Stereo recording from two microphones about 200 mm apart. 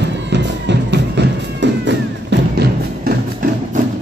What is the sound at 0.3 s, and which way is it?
Music, 60° right (ahead or behind).